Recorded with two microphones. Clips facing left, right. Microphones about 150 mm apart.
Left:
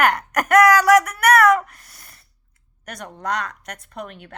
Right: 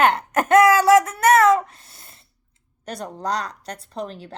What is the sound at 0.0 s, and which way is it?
Speech, 25° right (ahead or behind).